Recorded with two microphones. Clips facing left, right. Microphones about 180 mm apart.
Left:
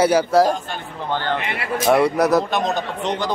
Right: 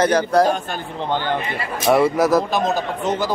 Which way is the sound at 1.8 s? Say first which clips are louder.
Right 1 dB; centre (ahead or behind).